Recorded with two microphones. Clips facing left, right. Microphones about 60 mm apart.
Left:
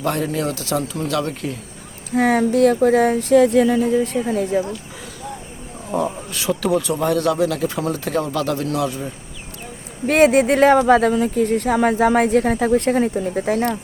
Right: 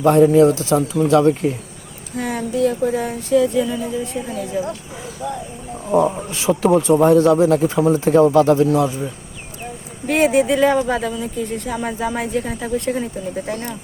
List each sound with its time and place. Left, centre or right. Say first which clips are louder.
0.0 s speech: right 10 dB; right
2.1 s speech: left 6 dB; left
4.3 s speech: left 4 dB; left
5.9 s speech: right 6 dB; centre
6.1 s speech: right 4 dB; right
7.8 s speech: right 7 dB; centre
8.0 s speech: right 12 dB; right
10.1 s speech: left 2 dB; left